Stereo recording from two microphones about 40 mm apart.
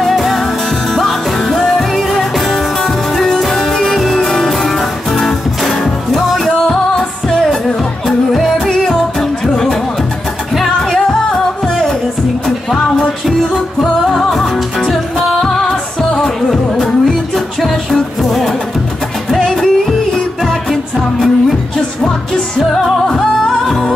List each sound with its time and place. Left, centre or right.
0.0 s music: centre
8.5 s music: centre
14.0 s music: centre
19.4 s music: centre
20.7 s music: centre
23.0 s music: centre